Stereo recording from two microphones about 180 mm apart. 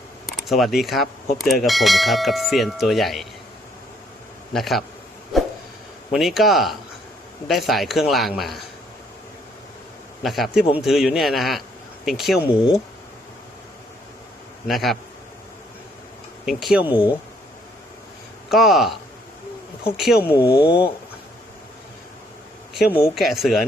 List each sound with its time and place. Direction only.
0.3 s speech: centre (ahead or behind)
4.5 s speech: centre (ahead or behind)
6.1 s speech: centre (ahead or behind)
10.2 s speech: centre (ahead or behind)
14.7 s speech: centre (ahead or behind)
16.5 s speech: centre (ahead or behind)
18.4 s speech: centre (ahead or behind)
20.2 s speech: 15° left (ahead or behind)
20.7 s speech: 30° left (ahead or behind)
22.9 s speech: 15° left (ahead or behind)
23.1 s speech: centre (ahead or behind)